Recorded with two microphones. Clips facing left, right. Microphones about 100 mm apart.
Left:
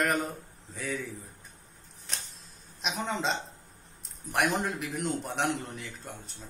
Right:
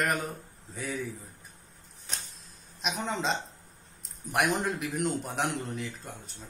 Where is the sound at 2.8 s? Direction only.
Centre (ahead or behind).